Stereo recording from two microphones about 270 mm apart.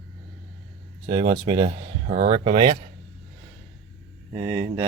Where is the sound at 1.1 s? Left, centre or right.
Centre.